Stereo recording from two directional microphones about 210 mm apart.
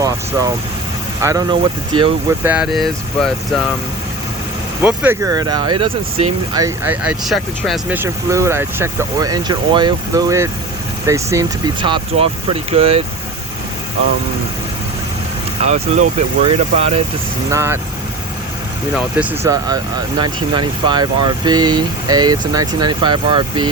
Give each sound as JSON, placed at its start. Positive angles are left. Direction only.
{"t": 0.0, "sound": "vehicle", "side_deg": -15}
{"t": 1.2, "sound": "speech", "side_deg": -15}
{"t": 2.4, "sound": "speech", "side_deg": -5}
{"t": 4.8, "sound": "speech", "side_deg": -10}
{"t": 15.6, "sound": "speech", "side_deg": -35}
{"t": 17.5, "sound": "speech", "side_deg": -10}
{"t": 18.9, "sound": "speech", "side_deg": -5}
{"t": 19.5, "sound": "speech", "side_deg": -20}